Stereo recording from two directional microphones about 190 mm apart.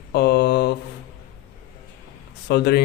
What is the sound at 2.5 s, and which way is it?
Speech, 60° left (ahead or behind).